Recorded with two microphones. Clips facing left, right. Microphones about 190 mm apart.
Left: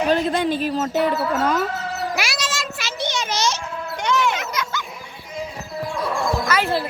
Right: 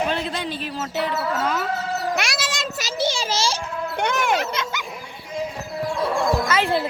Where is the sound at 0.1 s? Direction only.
50° left (ahead or behind).